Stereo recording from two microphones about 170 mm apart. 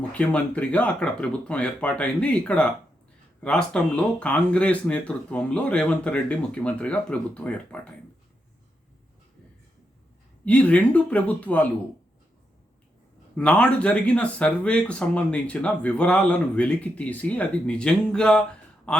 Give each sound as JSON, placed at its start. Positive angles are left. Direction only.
{"t": 0.1, "sound": "speech", "side_deg": 10}
{"t": 10.4, "sound": "speech", "side_deg": 5}
{"t": 13.3, "sound": "speech", "side_deg": 5}